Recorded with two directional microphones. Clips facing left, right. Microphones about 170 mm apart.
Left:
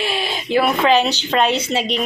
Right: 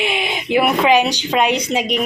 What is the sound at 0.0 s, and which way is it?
Speech, 15° right (ahead or behind).